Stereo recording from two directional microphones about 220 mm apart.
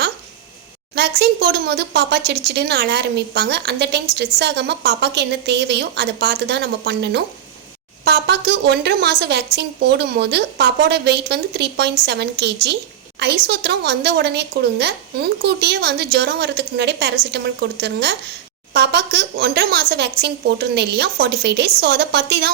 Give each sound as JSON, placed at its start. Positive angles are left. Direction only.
{"t": 0.9, "sound": "speech", "side_deg": -50}